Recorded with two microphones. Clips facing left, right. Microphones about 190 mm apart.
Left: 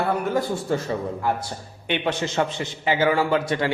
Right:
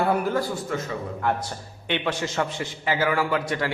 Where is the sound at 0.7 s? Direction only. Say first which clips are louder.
Left 6 dB; 30° left (ahead or behind).